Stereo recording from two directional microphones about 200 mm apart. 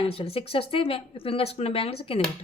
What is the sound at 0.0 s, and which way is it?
A woman's voice, 30° left (ahead or behind).